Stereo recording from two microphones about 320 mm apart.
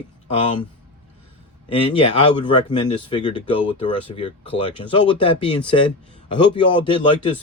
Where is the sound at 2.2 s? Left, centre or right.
Centre.